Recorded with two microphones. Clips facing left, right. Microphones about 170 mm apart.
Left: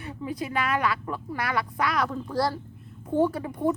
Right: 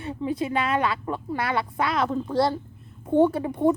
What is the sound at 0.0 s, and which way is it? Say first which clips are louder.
A woman's voice: right 5 dB; 25° right (ahead or behind).